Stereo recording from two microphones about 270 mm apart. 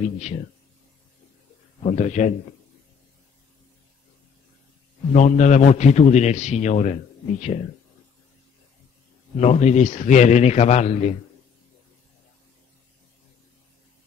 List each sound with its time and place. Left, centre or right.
1.8 s a man's voice: left
5.1 s a man's voice: left
9.4 s a man's voice: left